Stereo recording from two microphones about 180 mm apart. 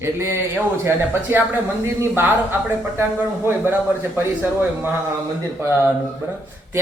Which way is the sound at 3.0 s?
10° right (ahead or behind).